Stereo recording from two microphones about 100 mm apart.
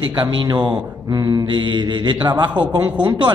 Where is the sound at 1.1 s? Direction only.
40° right (ahead or behind).